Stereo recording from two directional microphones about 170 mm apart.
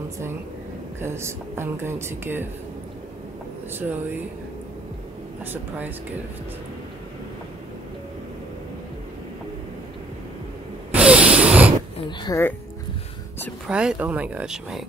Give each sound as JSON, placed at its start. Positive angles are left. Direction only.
{"t": 1.0, "sound": "a woman's voice", "side_deg": -15}
{"t": 3.7, "sound": "a woman's voice", "side_deg": -10}
{"t": 5.4, "sound": "a woman's voice", "side_deg": -10}
{"t": 10.9, "sound": "a sound", "side_deg": -5}
{"t": 12.3, "sound": "speech", "side_deg": 20}
{"t": 13.7, "sound": "speech", "side_deg": -5}